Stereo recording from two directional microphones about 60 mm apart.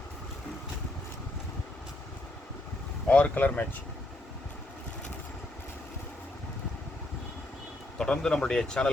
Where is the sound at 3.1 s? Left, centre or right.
Left.